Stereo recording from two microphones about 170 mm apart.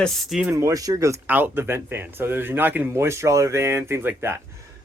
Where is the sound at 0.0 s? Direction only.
Centre (ahead or behind).